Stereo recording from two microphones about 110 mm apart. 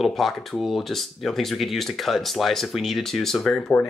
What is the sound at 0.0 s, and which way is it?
Speech, centre (ahead or behind).